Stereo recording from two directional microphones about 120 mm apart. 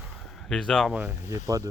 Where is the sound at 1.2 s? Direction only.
30° right (ahead or behind).